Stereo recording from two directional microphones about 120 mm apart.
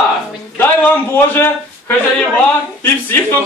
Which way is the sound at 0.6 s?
15° left (ahead or behind).